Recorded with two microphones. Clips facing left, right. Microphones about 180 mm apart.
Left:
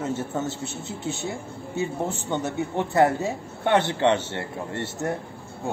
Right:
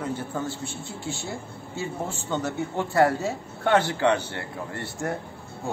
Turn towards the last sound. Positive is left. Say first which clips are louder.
# left 2 dB
turn(degrees=25)  # may be behind; listen again after turning